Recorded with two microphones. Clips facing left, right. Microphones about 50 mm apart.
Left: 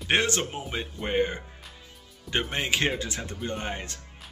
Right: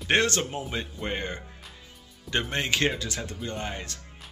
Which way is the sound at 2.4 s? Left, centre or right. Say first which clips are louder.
Right 1 dB; centre.